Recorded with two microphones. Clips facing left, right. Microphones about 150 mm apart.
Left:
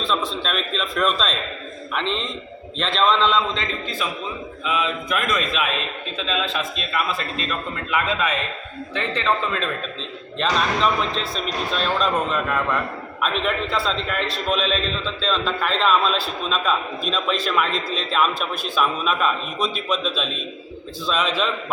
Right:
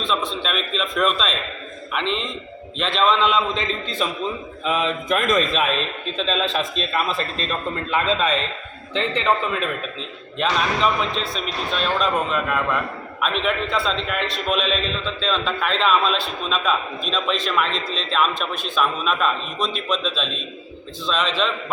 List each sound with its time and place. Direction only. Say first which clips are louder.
0.0 s a man's voice: even; centre (ahead or behind)
4.6 s mantra: right 2 dB; 40° right (ahead or behind)
7.9 s a man's voice: right 2 dB; 30° right (ahead or behind)
8.9 s a man's voice: right 2 dB; 20° right (ahead or behind)
10.3 s a man's voice: even; 5° right (ahead or behind)